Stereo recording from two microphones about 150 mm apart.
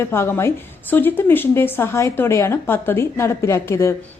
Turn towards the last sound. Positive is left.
turn(degrees=20)  # may be behind; listen again after turning